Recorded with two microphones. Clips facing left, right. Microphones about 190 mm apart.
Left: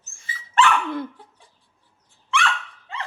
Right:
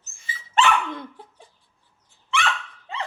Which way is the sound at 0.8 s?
5° left (ahead or behind).